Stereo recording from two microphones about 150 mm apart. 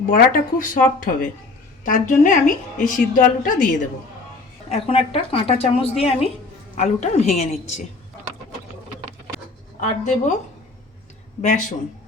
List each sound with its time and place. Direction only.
0.1 s a woman's voice: 65° left (ahead or behind)
4.7 s a woman's voice: 40° left (ahead or behind)
6.7 s a woman's voice: 50° left (ahead or behind)
9.8 s a woman's voice: 55° left (ahead or behind)